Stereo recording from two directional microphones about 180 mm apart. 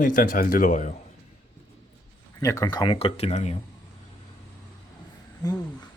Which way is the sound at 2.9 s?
35° left (ahead or behind).